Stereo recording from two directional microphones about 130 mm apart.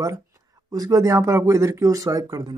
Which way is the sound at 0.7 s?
30° right (ahead or behind).